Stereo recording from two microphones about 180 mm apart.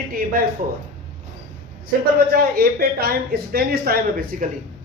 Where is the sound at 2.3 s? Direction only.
55° right (ahead or behind).